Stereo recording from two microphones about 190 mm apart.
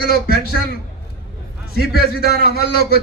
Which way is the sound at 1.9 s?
55° left (ahead or behind).